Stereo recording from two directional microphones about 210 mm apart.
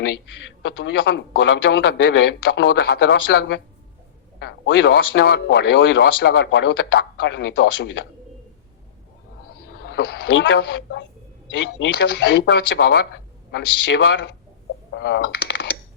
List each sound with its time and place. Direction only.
0.6 s speech: 60° left (ahead or behind)
9.6 s speech: 50° left (ahead or behind)